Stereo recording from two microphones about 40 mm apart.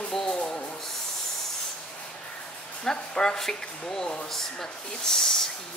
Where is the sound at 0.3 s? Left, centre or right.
Left.